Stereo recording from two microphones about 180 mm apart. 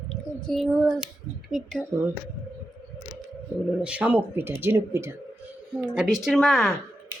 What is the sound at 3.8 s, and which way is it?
Speech, 10° right (ahead or behind).